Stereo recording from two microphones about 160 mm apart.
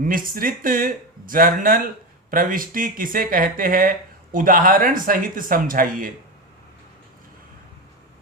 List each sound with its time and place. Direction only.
0.0 s speech: 60° right (ahead or behind)